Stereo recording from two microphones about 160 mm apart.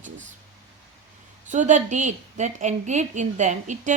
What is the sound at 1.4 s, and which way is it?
Speech, 50° right (ahead or behind).